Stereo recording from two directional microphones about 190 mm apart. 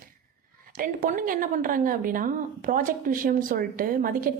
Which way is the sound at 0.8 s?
45° right (ahead or behind).